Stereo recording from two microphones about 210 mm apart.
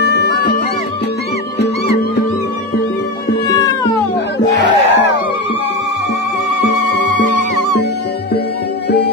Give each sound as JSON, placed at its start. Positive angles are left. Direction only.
{"t": 0.0, "sound": "music", "side_deg": 55}
{"t": 4.6, "sound": "music", "side_deg": 55}
{"t": 6.7, "sound": "music", "side_deg": 75}